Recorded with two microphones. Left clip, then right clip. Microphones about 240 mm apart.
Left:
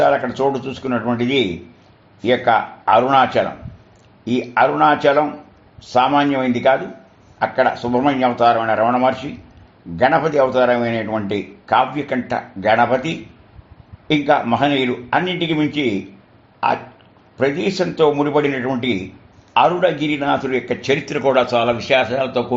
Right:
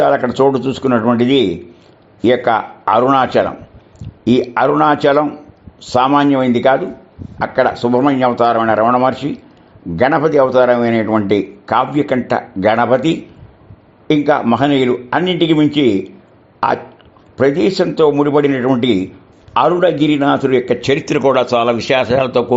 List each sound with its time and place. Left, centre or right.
0.0 s a man's voice: right